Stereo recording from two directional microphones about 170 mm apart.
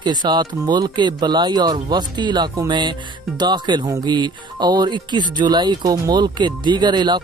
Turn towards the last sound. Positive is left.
turn(degrees=-25)  # may be behind; listen again after turning